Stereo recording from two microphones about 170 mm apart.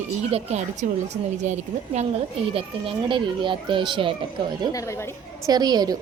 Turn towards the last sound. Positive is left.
turn(degrees=-25)  # may be behind; listen again after turning